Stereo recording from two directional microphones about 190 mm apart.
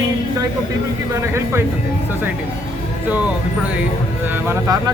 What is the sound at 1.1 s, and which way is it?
Speech, 15° right (ahead or behind).